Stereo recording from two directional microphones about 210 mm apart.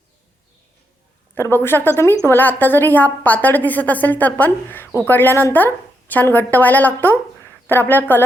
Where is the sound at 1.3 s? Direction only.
10° left (ahead or behind).